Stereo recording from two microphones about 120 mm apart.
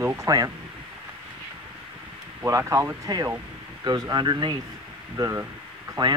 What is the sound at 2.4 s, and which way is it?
Speech, 25° right (ahead or behind).